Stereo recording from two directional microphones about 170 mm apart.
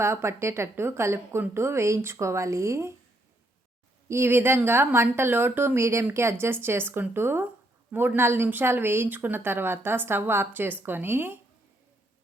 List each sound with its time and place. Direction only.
0.0 s a woman's voice: 15° right (ahead or behind)
4.1 s a woman's voice: 15° right (ahead or behind)